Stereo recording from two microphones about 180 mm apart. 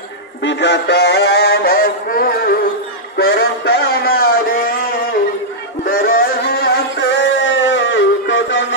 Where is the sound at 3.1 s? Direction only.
65° left (ahead or behind).